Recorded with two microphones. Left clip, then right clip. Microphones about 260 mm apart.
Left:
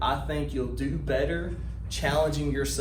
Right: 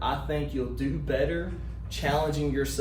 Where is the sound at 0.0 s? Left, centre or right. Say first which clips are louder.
Left 1 dB; centre.